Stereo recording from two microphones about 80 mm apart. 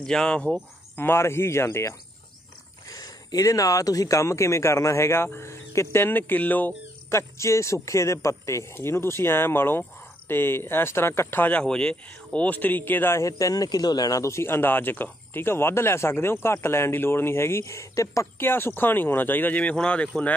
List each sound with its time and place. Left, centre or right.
0.0 s speech: centre
0.9 s a man's voice: left
2.9 s a man's voice: left
7.1 s a man's voice: left
11.6 s speech: centre
13.4 s a man's voice: left
18.4 s speech: left